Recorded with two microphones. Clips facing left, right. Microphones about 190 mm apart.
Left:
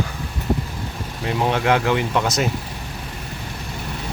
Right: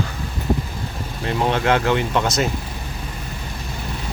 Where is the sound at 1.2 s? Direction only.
10° left (ahead or behind).